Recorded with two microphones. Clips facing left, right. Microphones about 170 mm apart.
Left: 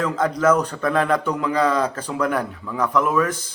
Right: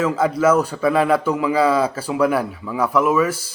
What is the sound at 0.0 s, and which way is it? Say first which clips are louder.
A man's voice: right 2 dB; 5° right (ahead or behind).